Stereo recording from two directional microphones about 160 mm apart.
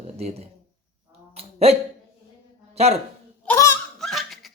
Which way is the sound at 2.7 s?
40° right (ahead or behind).